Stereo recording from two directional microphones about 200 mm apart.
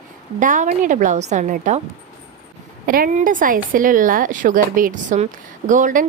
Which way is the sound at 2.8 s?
45° right (ahead or behind).